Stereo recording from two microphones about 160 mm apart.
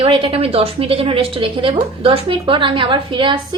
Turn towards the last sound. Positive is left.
turn(degrees=-30)  # may be behind; listen again after turning